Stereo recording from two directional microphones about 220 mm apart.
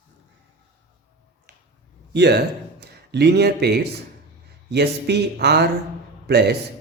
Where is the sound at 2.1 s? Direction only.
50° right (ahead or behind).